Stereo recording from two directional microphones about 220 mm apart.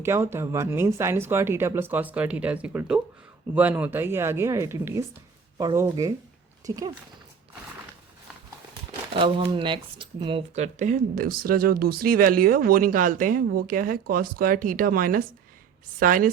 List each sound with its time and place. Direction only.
0.0 s speech: 10° right (ahead or behind)
9.1 s speech: 25° right (ahead or behind); by 16.3 s 40° right (ahead or behind)